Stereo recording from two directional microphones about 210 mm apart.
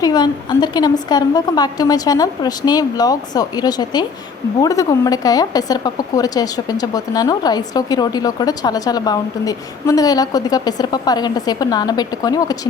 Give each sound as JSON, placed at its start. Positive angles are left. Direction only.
{"t": 0.0, "sound": "a woman's voice", "side_deg": 20}